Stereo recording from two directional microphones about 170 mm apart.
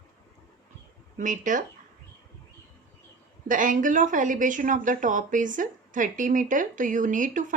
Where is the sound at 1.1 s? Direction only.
50° right (ahead or behind).